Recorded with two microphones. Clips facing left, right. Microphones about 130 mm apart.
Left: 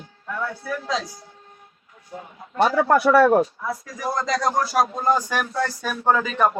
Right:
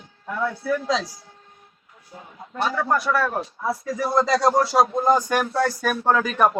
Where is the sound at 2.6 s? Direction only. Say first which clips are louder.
Left 5 dB; 65° left (ahead or behind).